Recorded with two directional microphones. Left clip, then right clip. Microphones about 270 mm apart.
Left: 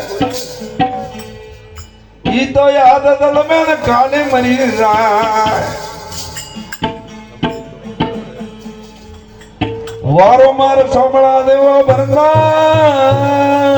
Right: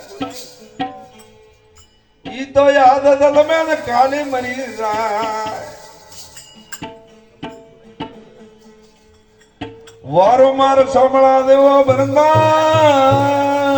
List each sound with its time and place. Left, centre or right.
2.2 s speech: right
10.2 s a man's voice: right